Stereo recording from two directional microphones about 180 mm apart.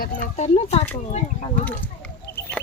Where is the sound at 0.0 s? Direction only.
45° left (ahead or behind).